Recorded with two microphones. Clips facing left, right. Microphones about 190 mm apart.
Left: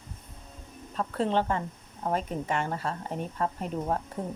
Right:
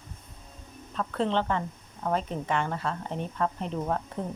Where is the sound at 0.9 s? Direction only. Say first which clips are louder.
Even; 35° left (ahead or behind).